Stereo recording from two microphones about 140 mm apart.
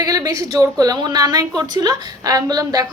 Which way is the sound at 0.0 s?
25° right (ahead or behind).